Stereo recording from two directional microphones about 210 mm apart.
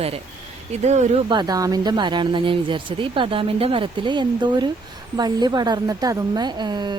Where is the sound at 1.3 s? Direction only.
20° right (ahead or behind).